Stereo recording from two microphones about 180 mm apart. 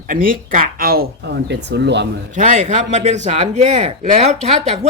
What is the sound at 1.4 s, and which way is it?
Speech, 70° right (ahead or behind).